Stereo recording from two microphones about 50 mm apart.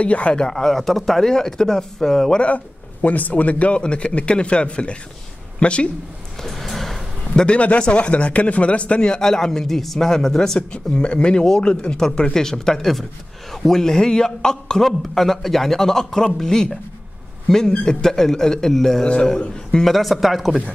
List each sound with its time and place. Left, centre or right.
0.0 s a man's voice: left
2.4 s speech: left
6.4 s music: centre
7.3 s speech: left
10.9 s a man's voice: left; by 20.5 s centre